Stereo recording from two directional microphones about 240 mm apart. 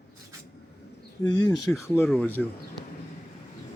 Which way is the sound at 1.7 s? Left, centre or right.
Centre.